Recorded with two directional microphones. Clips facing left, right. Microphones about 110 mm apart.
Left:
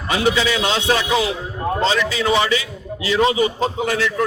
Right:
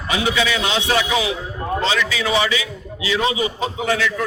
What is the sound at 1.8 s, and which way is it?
A man's voice, 35° left (ahead or behind).